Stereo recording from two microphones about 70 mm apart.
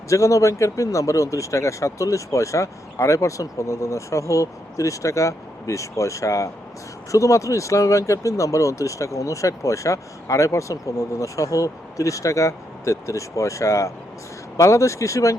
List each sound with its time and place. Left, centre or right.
0.1 s speech: left